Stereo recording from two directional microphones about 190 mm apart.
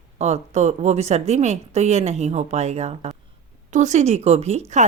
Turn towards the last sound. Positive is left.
turn(degrees=-35)  # may be behind; listen again after turning